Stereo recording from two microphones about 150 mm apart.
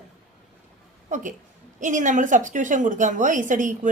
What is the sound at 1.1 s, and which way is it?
A woman's voice, 60° right (ahead or behind).